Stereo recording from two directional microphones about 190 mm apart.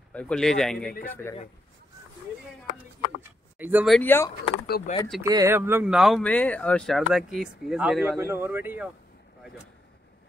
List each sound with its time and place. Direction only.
0.1 s speech: 5° left (ahead or behind)
3.2 s a sound: 10° right (ahead or behind)
3.9 s speech: 10° left (ahead or behind)
4.9 s speech: 40° left (ahead or behind)
5.2 s speech: 15° right (ahead or behind)